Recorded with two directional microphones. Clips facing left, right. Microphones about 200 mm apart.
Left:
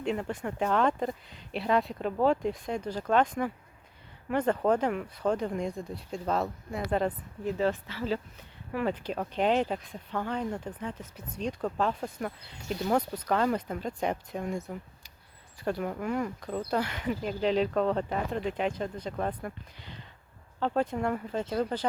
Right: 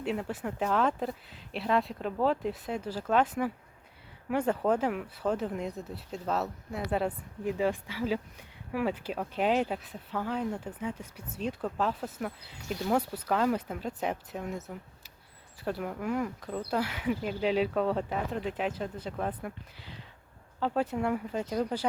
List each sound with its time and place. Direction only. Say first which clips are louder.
0.0 s speech: left 1 dB; 5° right (ahead or behind)